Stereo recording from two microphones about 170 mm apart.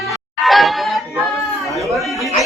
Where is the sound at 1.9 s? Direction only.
Centre (ahead or behind).